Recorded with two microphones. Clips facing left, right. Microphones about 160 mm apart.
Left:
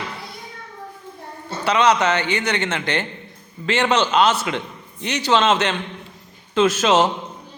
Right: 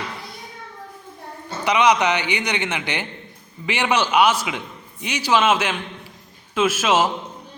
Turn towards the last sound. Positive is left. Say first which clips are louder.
# left 3 dB
turn(degrees=-5)  # may be behind; listen again after turning